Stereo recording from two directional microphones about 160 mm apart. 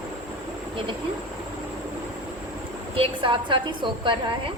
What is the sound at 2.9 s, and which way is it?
A woman's voice, 35° right (ahead or behind).